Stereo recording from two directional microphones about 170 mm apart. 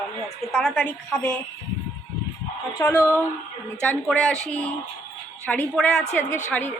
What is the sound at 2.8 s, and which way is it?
A woman's voice, 15° left (ahead or behind).